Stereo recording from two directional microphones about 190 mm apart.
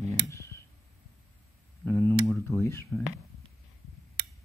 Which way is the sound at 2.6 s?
15° left (ahead or behind).